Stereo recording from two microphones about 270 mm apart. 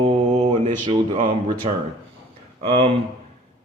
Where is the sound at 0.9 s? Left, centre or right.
Right.